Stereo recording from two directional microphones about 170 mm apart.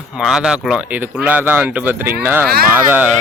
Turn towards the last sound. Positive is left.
turn(degrees=-10)  # may be behind; listen again after turning